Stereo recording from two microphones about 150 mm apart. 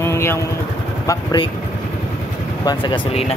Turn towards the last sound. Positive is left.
turn(degrees=35)  # may be behind; listen again after turning